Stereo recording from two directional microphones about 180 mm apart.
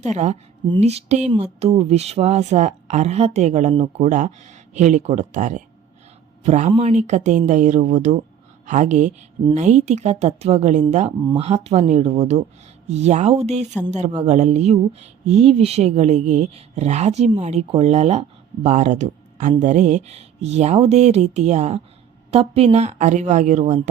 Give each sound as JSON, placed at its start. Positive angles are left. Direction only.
{"t": 0.0, "sound": "speech", "side_deg": -40}